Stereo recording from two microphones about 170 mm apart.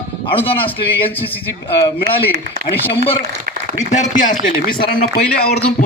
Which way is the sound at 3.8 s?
45° left (ahead or behind).